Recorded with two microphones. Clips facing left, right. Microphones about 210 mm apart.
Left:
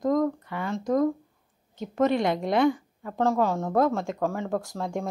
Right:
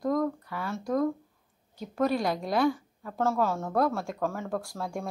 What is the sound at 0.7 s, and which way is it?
A woman's voice, 20° left (ahead or behind).